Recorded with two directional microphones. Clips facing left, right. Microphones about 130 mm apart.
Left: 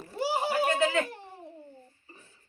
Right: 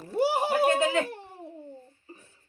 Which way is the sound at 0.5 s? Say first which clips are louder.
Right 1 dB; 15° right (ahead or behind).